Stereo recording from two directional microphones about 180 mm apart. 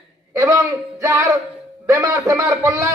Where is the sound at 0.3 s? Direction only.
15° right (ahead or behind).